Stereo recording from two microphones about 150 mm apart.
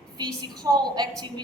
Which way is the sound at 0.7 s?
30° right (ahead or behind).